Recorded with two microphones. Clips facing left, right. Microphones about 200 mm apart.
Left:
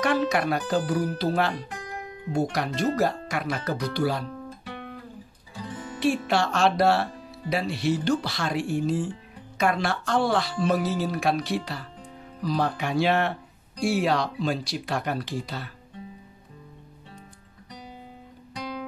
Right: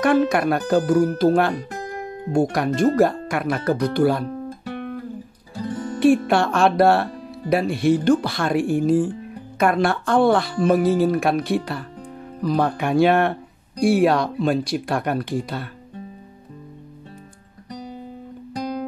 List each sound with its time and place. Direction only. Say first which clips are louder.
0.0 s speech: right 6 dB; 50° right (ahead or behind)
17.6 s music: right 9 dB; 40° right (ahead or behind)